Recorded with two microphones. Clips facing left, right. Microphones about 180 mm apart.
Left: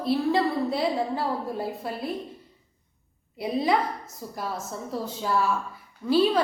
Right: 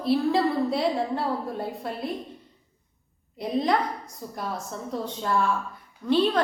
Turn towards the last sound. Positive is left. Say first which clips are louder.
# left 1 dB
turn(degrees=5)  # may be behind; listen again after turning